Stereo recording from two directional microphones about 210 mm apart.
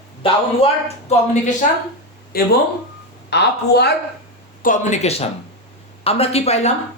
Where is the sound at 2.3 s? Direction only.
45° left (ahead or behind).